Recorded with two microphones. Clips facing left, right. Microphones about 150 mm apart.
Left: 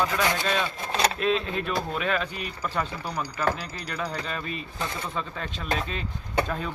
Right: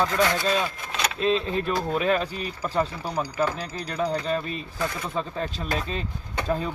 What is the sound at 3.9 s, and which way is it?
Speech, 30° right (ahead or behind).